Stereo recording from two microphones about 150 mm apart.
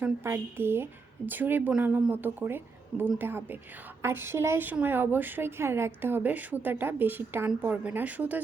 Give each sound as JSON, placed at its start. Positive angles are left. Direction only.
{"t": 0.0, "sound": "speech", "side_deg": -15}